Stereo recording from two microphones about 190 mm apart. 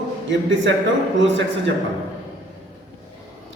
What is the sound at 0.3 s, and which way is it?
Speech, 75° right (ahead or behind).